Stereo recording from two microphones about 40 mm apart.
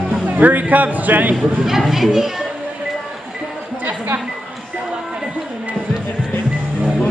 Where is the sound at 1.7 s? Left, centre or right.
Centre.